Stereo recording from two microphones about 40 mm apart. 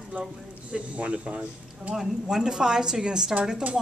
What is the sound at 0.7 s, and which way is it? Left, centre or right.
Speech, right.